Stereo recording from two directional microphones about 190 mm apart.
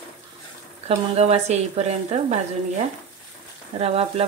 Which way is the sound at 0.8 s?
35° right (ahead or behind).